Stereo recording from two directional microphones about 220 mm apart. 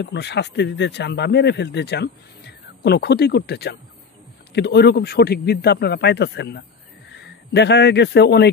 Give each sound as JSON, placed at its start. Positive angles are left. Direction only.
{"t": 0.0, "sound": "a man's voice", "side_deg": 50}